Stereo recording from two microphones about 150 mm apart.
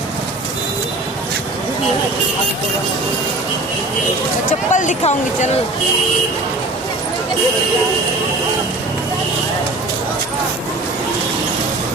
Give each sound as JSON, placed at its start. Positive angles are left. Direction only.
{"t": 4.7, "sound": "speech", "side_deg": 55}